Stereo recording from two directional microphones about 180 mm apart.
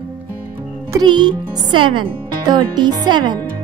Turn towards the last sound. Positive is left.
turn(degrees=-25)  # may be behind; listen again after turning